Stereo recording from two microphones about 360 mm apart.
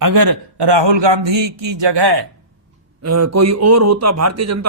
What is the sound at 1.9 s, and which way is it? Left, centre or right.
Speech, right.